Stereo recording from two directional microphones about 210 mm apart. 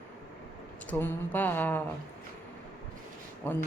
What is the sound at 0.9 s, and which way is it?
Speech, 10° left (ahead or behind).